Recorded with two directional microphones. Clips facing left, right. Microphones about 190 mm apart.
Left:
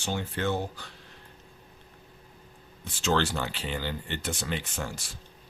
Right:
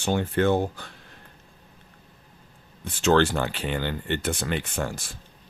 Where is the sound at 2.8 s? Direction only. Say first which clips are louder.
Right 7 dB; 55° right (ahead or behind).